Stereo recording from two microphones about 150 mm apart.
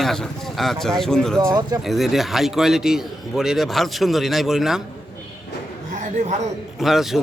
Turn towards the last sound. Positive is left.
turn(degrees=0)  # may be behind; listen again after turning